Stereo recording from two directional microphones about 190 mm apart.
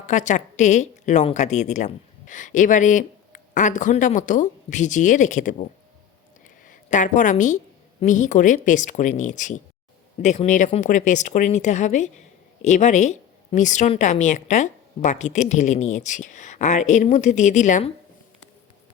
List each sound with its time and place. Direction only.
0.1 s a woman's voice: 40° left (ahead or behind)
6.7 s a woman's voice: 40° left (ahead or behind)